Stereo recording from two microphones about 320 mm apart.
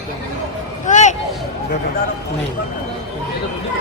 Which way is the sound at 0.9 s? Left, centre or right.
Left.